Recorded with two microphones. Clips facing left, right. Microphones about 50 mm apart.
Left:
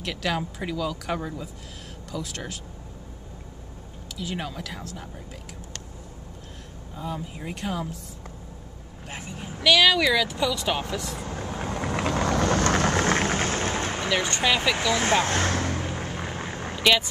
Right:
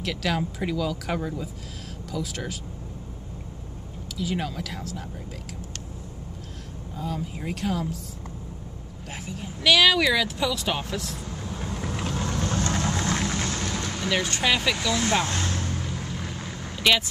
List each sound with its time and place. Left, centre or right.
0.0 s speech: centre
4.2 s speech: centre
7.3 s speech: centre
9.6 s speech: centre
11.2 s vehicle: left
14.1 s speech: centre
14.8 s speech: left
15.3 s vehicle: left
15.8 s vehicle: left
16.8 s speech: centre